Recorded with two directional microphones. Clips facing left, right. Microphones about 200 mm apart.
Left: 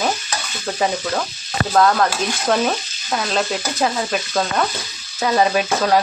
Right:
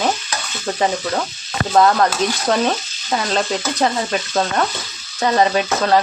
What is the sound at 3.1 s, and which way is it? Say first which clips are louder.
Speech: right 1 dB; centre (ahead or behind).